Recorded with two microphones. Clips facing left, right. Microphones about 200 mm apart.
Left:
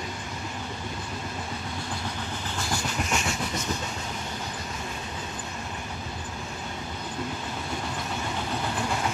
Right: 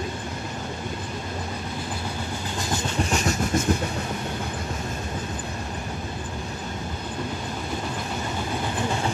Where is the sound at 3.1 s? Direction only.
40° right (ahead or behind).